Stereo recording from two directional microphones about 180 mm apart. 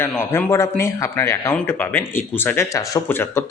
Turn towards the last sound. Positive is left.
turn(degrees=15)  # may be behind; listen again after turning